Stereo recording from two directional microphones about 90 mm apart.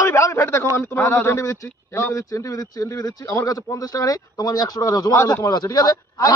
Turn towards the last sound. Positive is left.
turn(degrees=45)  # may be behind; listen again after turning